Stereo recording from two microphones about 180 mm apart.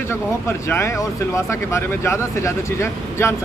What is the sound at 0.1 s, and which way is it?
Speech, 15° left (ahead or behind).